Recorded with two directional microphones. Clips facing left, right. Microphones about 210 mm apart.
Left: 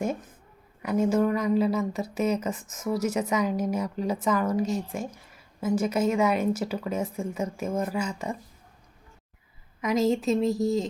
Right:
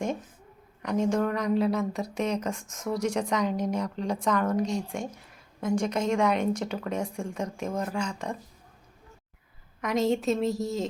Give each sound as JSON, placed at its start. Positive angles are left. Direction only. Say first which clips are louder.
{"t": 0.8, "sound": "speech", "louder": "left 2 dB", "side_deg": 5}
{"t": 9.8, "sound": "speech", "louder": "left 2 dB", "side_deg": 0}